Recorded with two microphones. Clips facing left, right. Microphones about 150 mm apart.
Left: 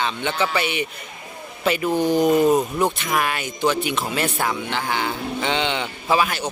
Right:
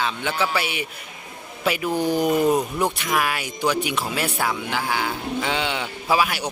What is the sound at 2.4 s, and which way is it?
Speech, 10° left (ahead or behind).